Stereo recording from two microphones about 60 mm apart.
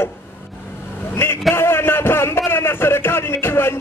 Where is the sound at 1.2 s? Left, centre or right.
Left.